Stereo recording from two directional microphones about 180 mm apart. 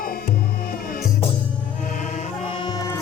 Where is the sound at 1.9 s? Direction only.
40° left (ahead or behind); by 2.9 s 20° left (ahead or behind).